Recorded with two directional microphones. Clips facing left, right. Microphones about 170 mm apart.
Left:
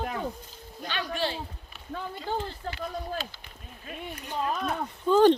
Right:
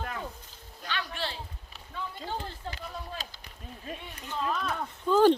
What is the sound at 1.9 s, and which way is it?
Speech, 45° left (ahead or behind).